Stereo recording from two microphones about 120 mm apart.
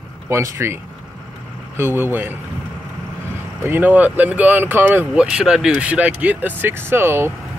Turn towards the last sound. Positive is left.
turn(degrees=-20)  # may be behind; listen again after turning